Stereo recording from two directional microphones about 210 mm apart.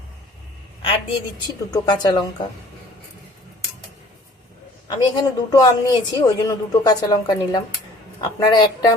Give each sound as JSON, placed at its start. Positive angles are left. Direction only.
{"t": 0.8, "sound": "a sound", "side_deg": 25}
{"t": 1.7, "sound": "speech", "side_deg": 20}
{"t": 4.9, "sound": "a woman's voice", "side_deg": 15}